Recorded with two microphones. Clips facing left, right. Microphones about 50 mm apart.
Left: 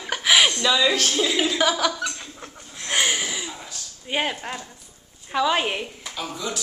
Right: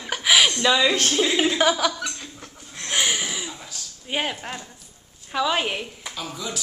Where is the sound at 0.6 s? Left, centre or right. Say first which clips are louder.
Right 1 dB; centre.